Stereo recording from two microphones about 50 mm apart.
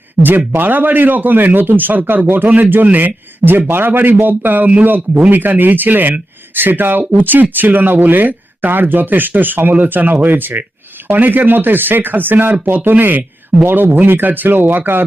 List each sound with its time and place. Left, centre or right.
0.2 s speech: right
12.9 s speech: right